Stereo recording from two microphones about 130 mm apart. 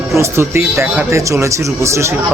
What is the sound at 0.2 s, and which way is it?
Speech, 20° right (ahead or behind).